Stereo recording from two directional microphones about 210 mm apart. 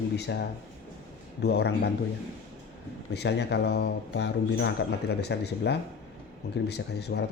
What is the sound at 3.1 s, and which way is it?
Speech, 55° left (ahead or behind).